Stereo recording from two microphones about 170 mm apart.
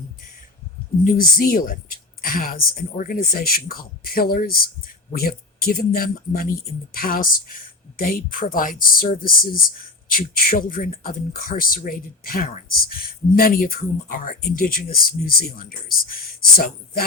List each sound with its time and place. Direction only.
1.0 s speech: 55° left (ahead or behind)